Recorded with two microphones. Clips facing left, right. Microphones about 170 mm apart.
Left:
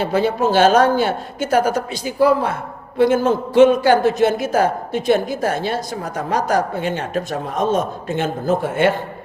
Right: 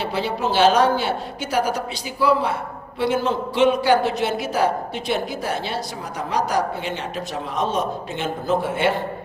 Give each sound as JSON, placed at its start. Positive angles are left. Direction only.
{"t": 0.0, "sound": "a man's voice", "side_deg": 45}